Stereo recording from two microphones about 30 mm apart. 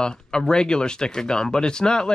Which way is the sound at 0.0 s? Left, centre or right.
Left.